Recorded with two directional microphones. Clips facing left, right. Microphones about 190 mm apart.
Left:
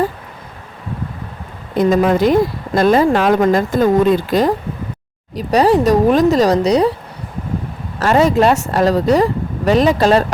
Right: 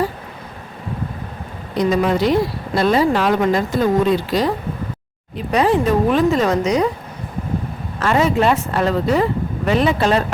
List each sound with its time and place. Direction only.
1.7 s speech: 50° left (ahead or behind)
5.4 s speech: 35° left (ahead or behind)
7.9 s speech: 40° left (ahead or behind)